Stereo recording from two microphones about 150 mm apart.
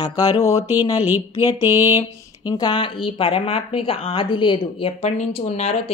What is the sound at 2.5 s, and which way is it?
A woman's voice, 30° left (ahead or behind).